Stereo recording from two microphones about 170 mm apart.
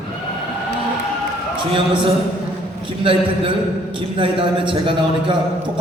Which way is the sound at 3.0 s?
30° right (ahead or behind).